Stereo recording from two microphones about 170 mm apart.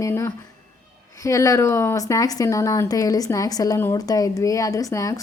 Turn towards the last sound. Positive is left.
turn(degrees=20)  # may be behind; listen again after turning